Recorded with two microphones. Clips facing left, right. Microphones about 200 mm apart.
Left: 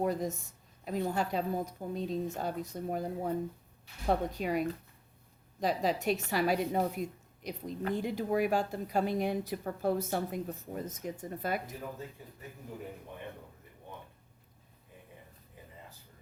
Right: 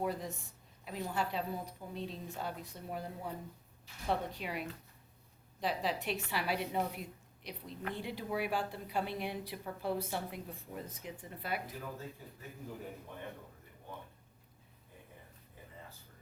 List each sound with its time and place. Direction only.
0.0 s a woman's voice: 45° left (ahead or behind)